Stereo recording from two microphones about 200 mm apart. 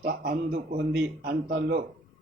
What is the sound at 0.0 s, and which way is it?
A man's voice, 45° right (ahead or behind).